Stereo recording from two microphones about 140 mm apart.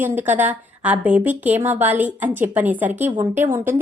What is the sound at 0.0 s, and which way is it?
Speech, 15° right (ahead or behind).